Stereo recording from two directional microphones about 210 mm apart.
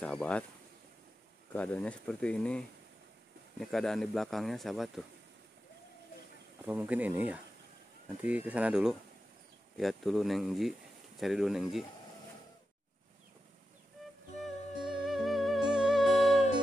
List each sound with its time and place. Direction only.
0.0 s speech: 5° left (ahead or behind)
1.5 s speech: 5° left (ahead or behind)
6.6 s speech: 10° right (ahead or behind)
15.0 s music: centre (ahead or behind)